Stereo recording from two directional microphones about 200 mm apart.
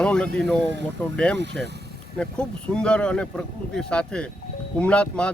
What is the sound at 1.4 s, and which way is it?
Speech, 60° right (ahead or behind).